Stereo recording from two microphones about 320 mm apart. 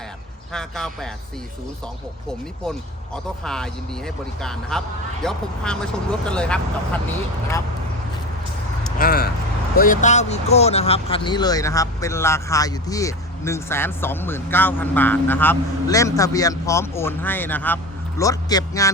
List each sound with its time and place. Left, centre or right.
0.5 s speech: centre
3.4 s speech: centre
9.0 s vehicle: left
9.7 s a man's voice: left